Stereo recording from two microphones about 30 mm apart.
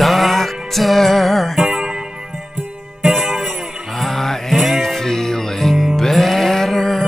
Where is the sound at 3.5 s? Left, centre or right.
Centre.